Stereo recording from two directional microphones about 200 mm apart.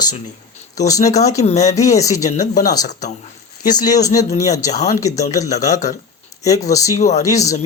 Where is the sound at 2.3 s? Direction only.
35° left (ahead or behind).